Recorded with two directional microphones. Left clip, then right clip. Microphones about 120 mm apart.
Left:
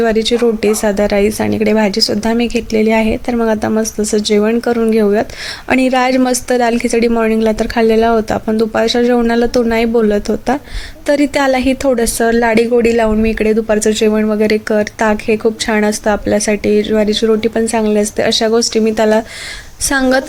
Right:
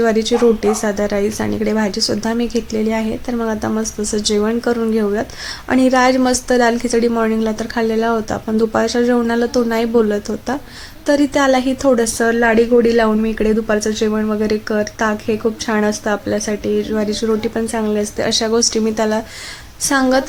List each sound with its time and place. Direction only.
0.0 s a woman's voice: 30° left (ahead or behind)